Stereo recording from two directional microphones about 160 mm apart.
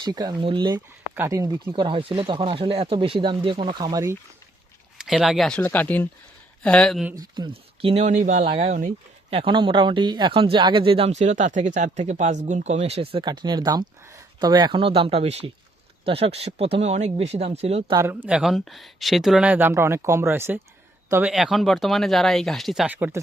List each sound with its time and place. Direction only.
0.0 s speech: 25° right (ahead or behind)
1.1 s speech: 15° right (ahead or behind)
4.9 s speech: 5° right (ahead or behind)
7.2 s speech: 25° right (ahead or behind)
7.8 s speech: 40° right (ahead or behind)
9.3 s speech: 35° right (ahead or behind)
17.9 s speech: 15° right (ahead or behind)
18.3 s speech: 5° right (ahead or behind)
21.3 s speech: centre (ahead or behind)